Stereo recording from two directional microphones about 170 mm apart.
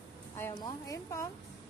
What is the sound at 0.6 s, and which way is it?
Speech, 20° left (ahead or behind).